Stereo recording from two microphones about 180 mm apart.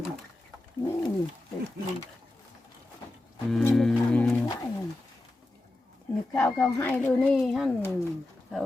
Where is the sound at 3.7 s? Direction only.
5° left (ahead or behind).